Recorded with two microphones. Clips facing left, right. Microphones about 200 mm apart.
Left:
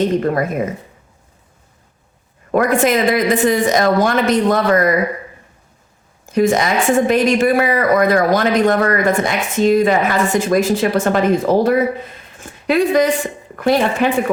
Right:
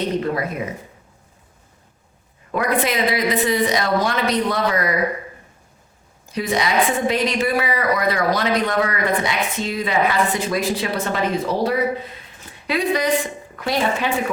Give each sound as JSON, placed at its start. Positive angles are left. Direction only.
{"t": 0.2, "sound": "a woman's voice", "side_deg": 50}
{"t": 2.5, "sound": "a woman's voice", "side_deg": 45}
{"t": 6.2, "sound": "a woman's voice", "side_deg": 50}
{"t": 12.4, "sound": "a sound", "side_deg": 50}
{"t": 13.6, "sound": "a woman's voice", "side_deg": 50}